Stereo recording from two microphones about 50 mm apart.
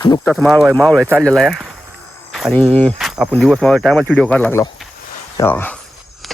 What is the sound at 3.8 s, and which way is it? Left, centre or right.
Speech, centre.